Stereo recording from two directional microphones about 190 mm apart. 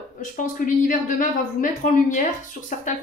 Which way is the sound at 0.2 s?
45° left (ahead or behind).